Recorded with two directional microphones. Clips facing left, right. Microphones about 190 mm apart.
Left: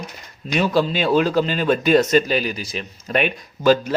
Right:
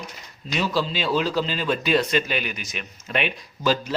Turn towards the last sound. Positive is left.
turn(degrees=50)  # may be behind; listen again after turning